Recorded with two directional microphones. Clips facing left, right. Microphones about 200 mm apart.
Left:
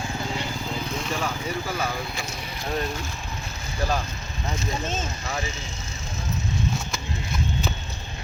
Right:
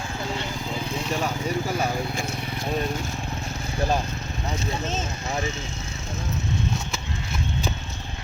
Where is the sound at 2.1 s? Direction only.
50° right (ahead or behind).